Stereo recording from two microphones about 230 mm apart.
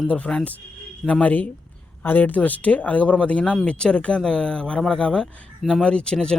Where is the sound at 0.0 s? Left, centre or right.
Centre.